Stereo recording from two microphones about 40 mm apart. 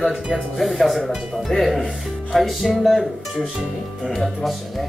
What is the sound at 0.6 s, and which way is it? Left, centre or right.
Speech, centre.